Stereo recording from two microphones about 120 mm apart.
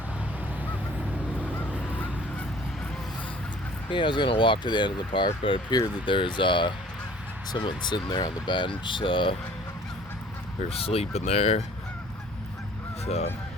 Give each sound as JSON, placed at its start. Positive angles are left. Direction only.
{"t": 3.8, "sound": "speech", "side_deg": 45}
{"t": 10.7, "sound": "speech", "side_deg": 55}
{"t": 13.1, "sound": "speech", "side_deg": 60}